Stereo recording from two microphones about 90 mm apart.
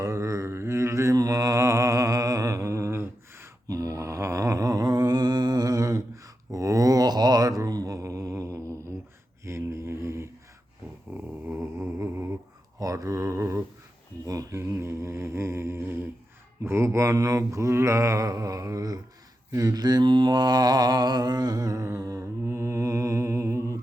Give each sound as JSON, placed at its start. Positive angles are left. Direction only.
{"t": 0.0, "sound": "mantra", "side_deg": -35}
{"t": 11.1, "sound": "dog", "side_deg": -20}
{"t": 12.8, "sound": "a sound", "side_deg": -40}
{"t": 14.3, "sound": "mantra", "side_deg": -35}